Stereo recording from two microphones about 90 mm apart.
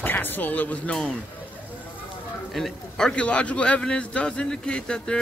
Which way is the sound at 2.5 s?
5° left (ahead or behind).